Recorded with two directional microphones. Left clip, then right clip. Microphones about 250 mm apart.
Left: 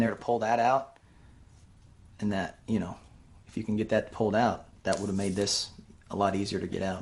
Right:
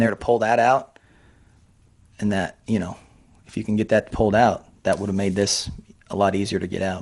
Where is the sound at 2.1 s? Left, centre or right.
Right.